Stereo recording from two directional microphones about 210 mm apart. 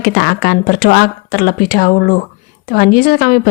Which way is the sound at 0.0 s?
45° left (ahead or behind).